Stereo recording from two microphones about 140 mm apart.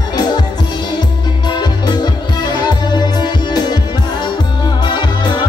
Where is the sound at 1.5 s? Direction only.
30° left (ahead or behind).